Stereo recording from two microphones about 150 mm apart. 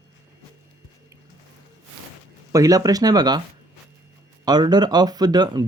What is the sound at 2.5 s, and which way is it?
Speech, 25° right (ahead or behind).